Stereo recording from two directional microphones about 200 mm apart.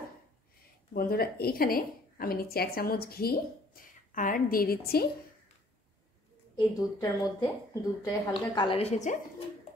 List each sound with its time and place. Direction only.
0.9 s a woman's voice: 50° left (ahead or behind)
6.5 s a woman's voice: 20° left (ahead or behind)